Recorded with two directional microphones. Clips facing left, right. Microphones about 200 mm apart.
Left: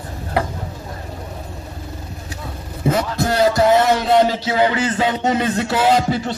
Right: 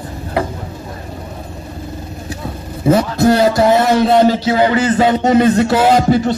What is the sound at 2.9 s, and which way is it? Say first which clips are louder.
Speech: right 9 dB; 30° right (ahead or behind).